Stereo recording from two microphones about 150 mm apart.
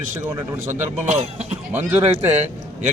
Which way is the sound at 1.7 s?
10° right (ahead or behind).